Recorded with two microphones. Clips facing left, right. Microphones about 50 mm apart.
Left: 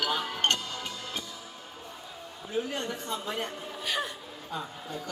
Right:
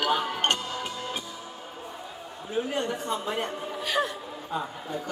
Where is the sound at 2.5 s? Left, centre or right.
Centre.